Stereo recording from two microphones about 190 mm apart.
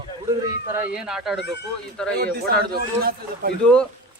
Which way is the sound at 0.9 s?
5° right (ahead or behind).